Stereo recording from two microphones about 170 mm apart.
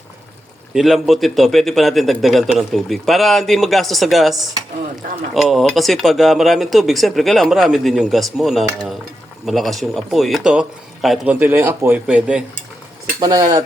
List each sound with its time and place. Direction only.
0.7 s speech: 5° right (ahead or behind)
13.1 s speech: 20° right (ahead or behind)